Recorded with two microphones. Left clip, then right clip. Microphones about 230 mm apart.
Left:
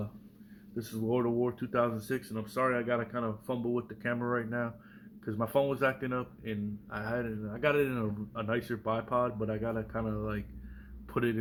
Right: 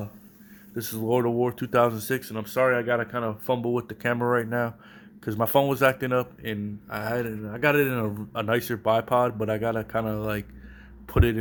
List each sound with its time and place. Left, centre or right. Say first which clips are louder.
0.8 s speech: right 7 dB; right